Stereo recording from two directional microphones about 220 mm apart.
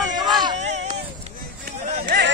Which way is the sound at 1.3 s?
40° right (ahead or behind).